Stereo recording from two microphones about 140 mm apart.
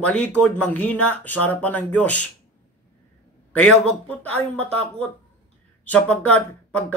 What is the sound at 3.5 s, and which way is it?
Speech, 10° left (ahead or behind).